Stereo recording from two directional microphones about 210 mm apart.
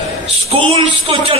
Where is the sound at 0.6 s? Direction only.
25° right (ahead or behind).